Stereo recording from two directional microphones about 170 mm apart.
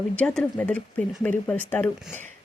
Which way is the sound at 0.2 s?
5° left (ahead or behind).